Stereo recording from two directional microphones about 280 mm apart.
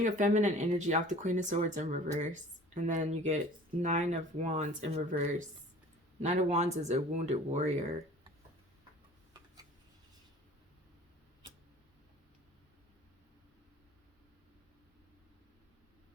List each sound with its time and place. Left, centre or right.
0.0 s speech: right